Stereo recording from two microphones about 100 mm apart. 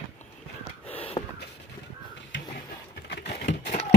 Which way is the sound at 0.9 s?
70° left (ahead or behind).